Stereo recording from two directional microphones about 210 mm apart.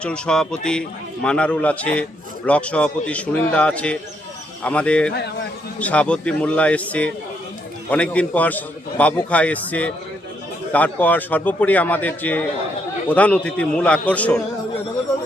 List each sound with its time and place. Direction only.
0.0 s a man's voice: 5° left (ahead or behind)